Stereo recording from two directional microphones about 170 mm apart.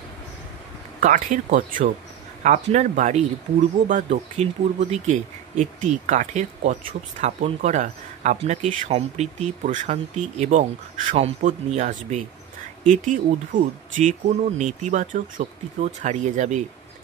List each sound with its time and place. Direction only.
1.0 s speech: 50° right (ahead or behind)